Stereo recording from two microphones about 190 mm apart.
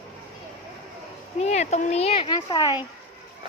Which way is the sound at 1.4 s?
35° left (ahead or behind).